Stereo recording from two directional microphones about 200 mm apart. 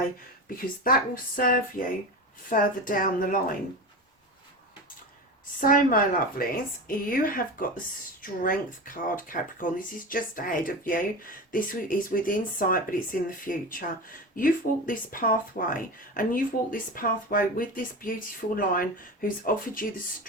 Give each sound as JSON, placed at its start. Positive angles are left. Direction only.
{"t": 0.6, "sound": "a woman's voice", "side_deg": 45}
{"t": 5.5, "sound": "speech", "side_deg": 45}